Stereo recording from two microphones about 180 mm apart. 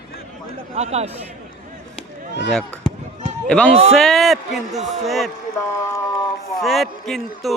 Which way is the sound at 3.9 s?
Centre (ahead or behind).